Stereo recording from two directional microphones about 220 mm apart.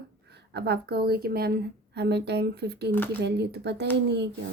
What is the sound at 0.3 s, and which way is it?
A woman's voice, 50° right (ahead or behind).